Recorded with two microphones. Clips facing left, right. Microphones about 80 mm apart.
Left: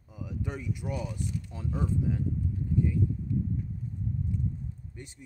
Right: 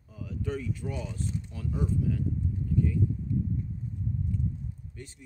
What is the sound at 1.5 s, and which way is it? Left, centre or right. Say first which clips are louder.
Speech: even; left.